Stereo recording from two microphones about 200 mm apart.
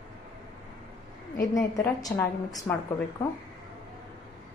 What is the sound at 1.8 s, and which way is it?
A woman's voice, 20° left (ahead or behind).